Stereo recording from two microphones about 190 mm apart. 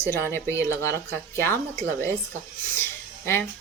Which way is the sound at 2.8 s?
10° left (ahead or behind).